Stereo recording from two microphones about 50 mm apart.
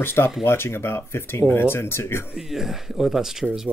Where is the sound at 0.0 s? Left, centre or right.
Left.